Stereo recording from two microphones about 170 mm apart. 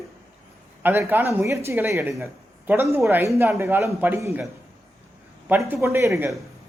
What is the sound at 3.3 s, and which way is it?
Speech, 10° right (ahead or behind).